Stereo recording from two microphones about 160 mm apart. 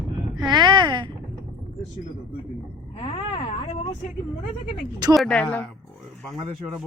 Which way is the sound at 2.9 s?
35° left (ahead or behind).